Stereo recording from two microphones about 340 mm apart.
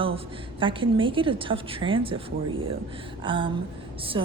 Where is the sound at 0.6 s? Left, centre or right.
Centre.